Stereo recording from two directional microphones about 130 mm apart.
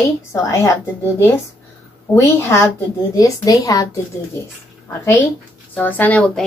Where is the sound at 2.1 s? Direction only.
20° left (ahead or behind).